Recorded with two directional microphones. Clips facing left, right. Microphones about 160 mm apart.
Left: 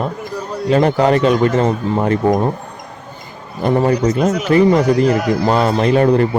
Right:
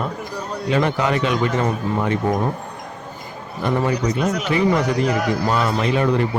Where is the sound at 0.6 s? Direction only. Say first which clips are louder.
Left 7 dB; 40° left (ahead or behind).